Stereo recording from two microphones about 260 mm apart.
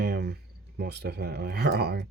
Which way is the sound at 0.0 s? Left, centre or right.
Right.